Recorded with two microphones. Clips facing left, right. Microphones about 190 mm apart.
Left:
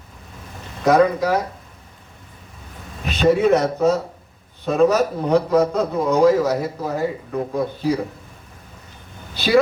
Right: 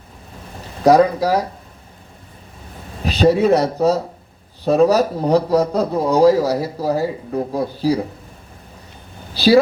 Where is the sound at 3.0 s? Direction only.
35° right (ahead or behind).